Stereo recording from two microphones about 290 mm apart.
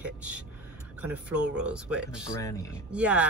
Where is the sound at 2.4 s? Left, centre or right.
Centre.